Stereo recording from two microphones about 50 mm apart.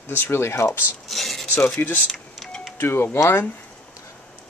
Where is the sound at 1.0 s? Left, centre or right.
Centre.